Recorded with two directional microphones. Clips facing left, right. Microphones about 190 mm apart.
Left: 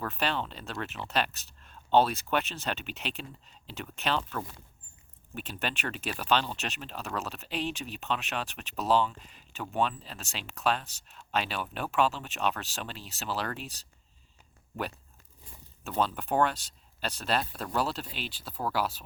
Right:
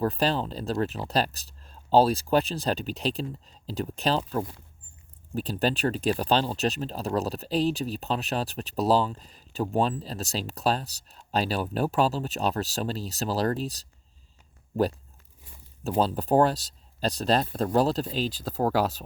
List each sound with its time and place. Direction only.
0.0 s speech: 35° right (ahead or behind)
5.3 s speech: 35° right (ahead or behind)
15.8 s speech: 35° right (ahead or behind)